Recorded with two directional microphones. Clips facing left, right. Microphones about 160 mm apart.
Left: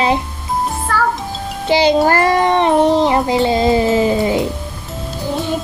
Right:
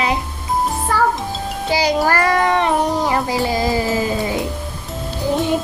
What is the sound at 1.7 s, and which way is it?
Child singing, 25° left (ahead or behind).